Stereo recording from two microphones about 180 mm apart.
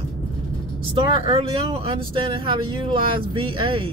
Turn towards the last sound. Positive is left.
turn(degrees=-30)  # may be behind; listen again after turning